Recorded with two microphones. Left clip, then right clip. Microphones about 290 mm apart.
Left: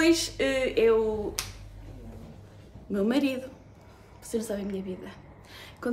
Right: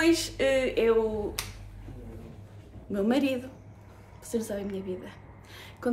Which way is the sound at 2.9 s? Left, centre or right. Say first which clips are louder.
Even; centre.